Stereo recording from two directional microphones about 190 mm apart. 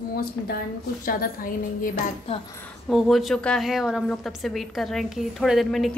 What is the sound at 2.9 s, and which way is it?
A woman's voice, centre (ahead or behind).